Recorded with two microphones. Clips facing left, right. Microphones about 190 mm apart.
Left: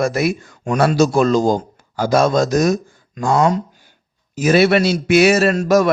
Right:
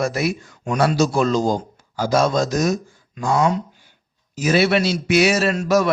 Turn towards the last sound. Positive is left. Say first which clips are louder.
# left 4 dB
turn(degrees=50)  # may be behind; listen again after turning